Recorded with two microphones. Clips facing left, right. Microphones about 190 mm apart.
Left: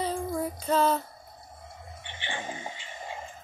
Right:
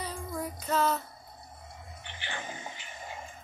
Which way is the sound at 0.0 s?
30° left (ahead or behind).